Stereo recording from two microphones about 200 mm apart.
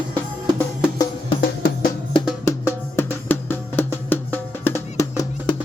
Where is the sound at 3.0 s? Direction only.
10° left (ahead or behind).